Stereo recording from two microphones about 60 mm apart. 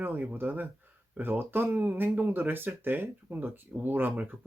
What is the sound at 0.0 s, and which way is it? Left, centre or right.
Speech, right.